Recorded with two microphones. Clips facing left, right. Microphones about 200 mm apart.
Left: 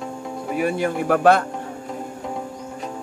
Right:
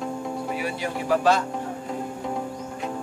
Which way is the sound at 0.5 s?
50° left (ahead or behind).